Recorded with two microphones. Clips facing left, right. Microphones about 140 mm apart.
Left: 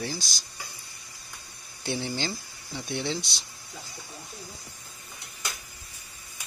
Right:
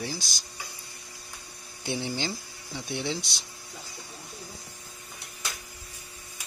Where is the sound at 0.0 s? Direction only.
10° right (ahead or behind).